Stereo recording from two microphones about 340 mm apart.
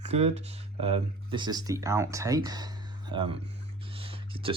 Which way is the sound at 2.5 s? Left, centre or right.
Centre.